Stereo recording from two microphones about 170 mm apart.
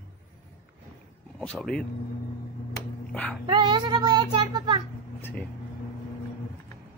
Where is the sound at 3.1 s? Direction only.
5° left (ahead or behind).